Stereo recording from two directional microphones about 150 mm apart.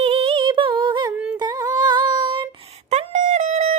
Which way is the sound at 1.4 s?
25° right (ahead or behind).